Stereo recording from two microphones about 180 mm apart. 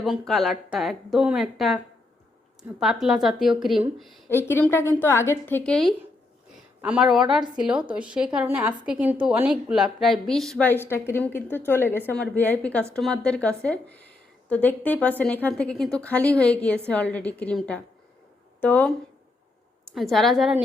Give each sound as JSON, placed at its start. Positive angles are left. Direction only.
{"t": 0.0, "sound": "a woman's voice", "side_deg": 0}
{"t": 2.8, "sound": "a woman's voice", "side_deg": 0}
{"t": 4.3, "sound": "a woman's voice", "side_deg": 10}